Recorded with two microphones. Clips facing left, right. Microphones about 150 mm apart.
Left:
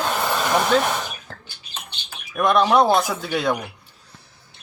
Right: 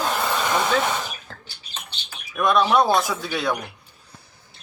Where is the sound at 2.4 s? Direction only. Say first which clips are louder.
Left 2 dB; 20° left (ahead or behind).